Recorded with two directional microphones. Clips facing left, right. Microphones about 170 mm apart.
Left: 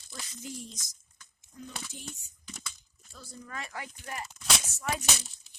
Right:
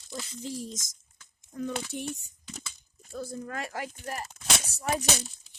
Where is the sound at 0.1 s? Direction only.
30° right (ahead or behind); by 0.9 s 45° right (ahead or behind).